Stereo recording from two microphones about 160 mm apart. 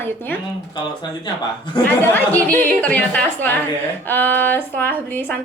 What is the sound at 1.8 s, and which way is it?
A woman's voice, 10° left (ahead or behind).